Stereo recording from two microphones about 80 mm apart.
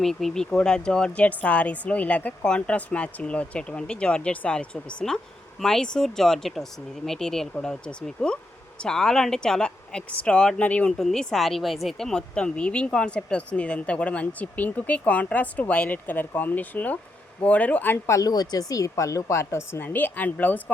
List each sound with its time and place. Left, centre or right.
0.0 s speech: centre; by 18.3 s left
18.3 s a woman's voice: left